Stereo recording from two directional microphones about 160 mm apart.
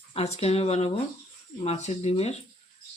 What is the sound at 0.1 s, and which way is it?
Speech, 40° left (ahead or behind).